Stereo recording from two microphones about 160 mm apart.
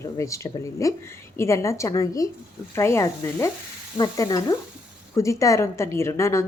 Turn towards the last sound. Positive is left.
turn(degrees=20)  # may be behind; listen again after turning